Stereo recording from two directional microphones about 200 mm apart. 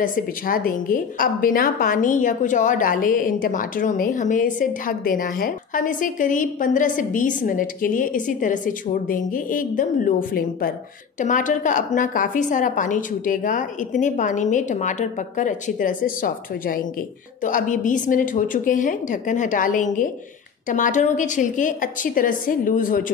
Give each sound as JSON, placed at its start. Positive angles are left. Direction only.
{"t": 0.0, "sound": "a woman's voice", "side_deg": 45}